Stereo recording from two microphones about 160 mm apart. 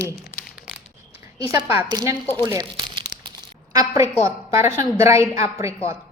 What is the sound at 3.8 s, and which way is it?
A woman's voice, 20° right (ahead or behind).